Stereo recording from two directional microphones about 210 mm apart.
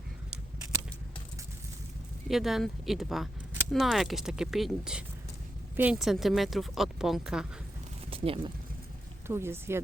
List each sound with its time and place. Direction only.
2.3 s speech: centre (ahead or behind)
8.1 s a sound: 25° right (ahead or behind)
9.2 s speech: 10° right (ahead or behind)